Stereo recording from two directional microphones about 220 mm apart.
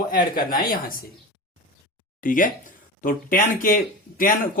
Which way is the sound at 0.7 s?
40° left (ahead or behind).